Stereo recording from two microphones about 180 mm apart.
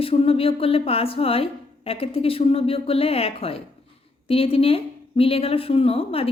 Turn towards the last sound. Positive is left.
turn(degrees=30)  # may be behind; listen again after turning